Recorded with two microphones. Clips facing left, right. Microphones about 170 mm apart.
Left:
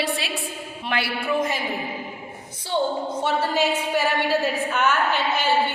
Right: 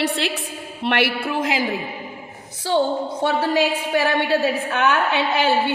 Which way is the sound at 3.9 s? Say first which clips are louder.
Right 6 dB; 65° right (ahead or behind).